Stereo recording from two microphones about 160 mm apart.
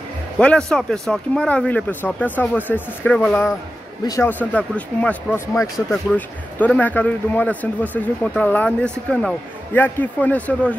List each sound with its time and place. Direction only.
0.4 s speech: 5° left (ahead or behind)
4.0 s a man's voice: 25° left (ahead or behind)
4.3 s speech: 10° left (ahead or behind)